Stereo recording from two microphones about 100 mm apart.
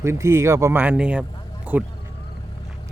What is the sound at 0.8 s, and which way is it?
A man's voice, 15° right (ahead or behind).